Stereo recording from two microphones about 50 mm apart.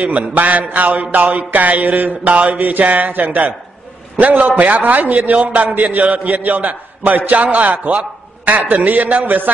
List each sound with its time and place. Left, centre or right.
0.0 s a man's voice: right